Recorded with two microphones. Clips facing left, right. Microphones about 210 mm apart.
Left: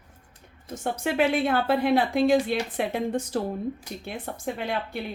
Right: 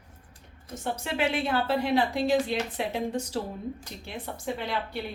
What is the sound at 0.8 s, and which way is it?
A woman's voice, 55° left (ahead or behind).